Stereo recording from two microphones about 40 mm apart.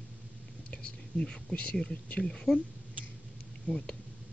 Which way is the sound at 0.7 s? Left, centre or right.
Left.